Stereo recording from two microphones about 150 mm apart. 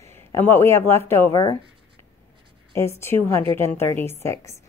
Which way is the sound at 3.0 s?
15° left (ahead or behind).